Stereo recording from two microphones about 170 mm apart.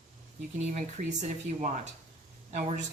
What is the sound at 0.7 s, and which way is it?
Speech, 45° right (ahead or behind).